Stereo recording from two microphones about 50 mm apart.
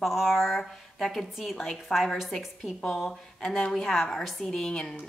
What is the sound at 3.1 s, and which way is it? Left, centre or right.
Speech, centre.